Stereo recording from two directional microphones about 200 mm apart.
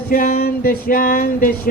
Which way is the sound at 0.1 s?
45° left (ahead or behind).